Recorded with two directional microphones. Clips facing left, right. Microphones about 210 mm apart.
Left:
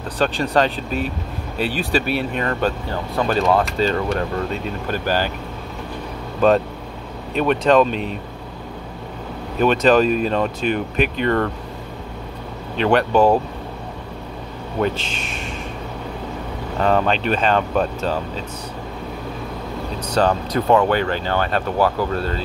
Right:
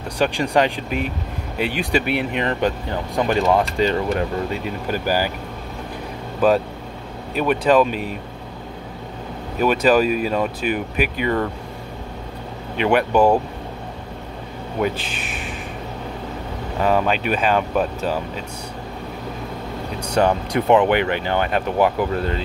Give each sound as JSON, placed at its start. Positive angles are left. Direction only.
{"t": 0.2, "sound": "speech", "side_deg": -10}
{"t": 7.3, "sound": "speech", "side_deg": -5}
{"t": 9.6, "sound": "speech", "side_deg": -10}
{"t": 12.7, "sound": "speech", "side_deg": -10}
{"t": 14.8, "sound": "speech", "side_deg": -10}
{"t": 16.8, "sound": "speech", "side_deg": -10}
{"t": 20.0, "sound": "speech", "side_deg": -15}